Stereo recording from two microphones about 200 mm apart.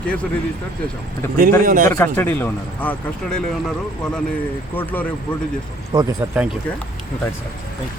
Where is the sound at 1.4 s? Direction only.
45° right (ahead or behind).